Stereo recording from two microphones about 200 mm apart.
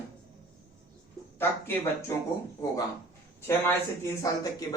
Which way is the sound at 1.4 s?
10° left (ahead or behind).